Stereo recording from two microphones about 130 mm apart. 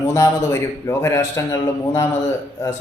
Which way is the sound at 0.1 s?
25° left (ahead or behind).